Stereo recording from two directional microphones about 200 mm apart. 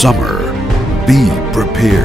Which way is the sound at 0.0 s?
Centre (ahead or behind).